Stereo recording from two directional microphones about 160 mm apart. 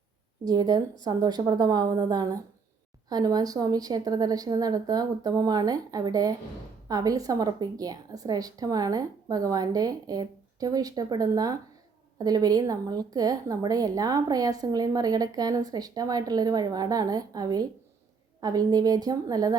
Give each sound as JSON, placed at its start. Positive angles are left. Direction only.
{"t": 0.4, "sound": "speech", "side_deg": -25}